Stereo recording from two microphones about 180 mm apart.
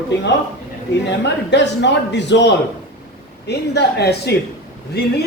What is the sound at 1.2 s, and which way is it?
Speech, 75° left (ahead or behind).